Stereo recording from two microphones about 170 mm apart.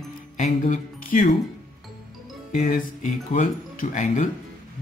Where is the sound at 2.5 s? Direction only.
50° left (ahead or behind).